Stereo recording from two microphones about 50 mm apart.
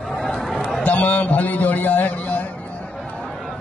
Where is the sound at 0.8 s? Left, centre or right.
Left.